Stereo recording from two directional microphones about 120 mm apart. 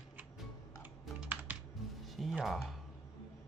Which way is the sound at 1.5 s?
15° right (ahead or behind).